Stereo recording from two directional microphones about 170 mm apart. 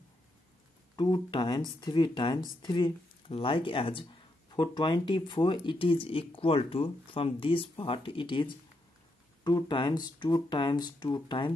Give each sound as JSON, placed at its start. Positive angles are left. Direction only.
{"t": 0.9, "sound": "speech", "side_deg": 25}